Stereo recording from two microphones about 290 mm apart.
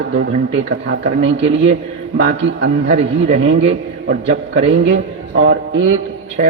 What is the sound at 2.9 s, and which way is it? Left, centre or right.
Speech, right.